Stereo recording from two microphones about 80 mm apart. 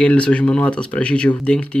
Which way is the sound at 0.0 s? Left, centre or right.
Centre.